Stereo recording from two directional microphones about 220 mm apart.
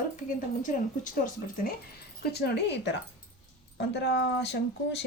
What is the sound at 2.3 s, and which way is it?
Speech, 50° left (ahead or behind).